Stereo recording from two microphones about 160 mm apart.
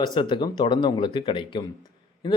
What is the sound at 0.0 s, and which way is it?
Speech, 30° left (ahead or behind).